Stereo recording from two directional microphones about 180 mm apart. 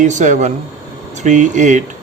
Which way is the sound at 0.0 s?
40° right (ahead or behind).